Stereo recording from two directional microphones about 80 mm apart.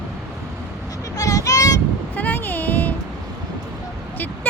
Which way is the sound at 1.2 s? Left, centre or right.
Left.